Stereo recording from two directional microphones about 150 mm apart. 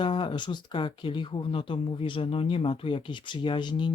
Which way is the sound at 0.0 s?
35° left (ahead or behind).